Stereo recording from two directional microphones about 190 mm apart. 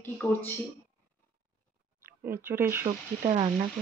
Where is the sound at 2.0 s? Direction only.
15° right (ahead or behind).